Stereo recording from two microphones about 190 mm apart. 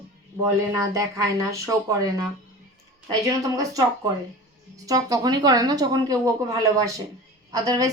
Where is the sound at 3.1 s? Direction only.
20° right (ahead or behind).